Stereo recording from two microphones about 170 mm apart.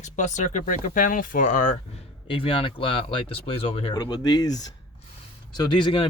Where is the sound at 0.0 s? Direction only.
45° left (ahead or behind).